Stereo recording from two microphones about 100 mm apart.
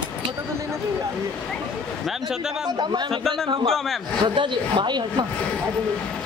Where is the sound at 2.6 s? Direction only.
50° right (ahead or behind).